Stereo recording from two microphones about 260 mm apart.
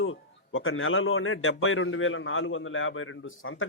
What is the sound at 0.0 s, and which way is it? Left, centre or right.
A man's voice, left.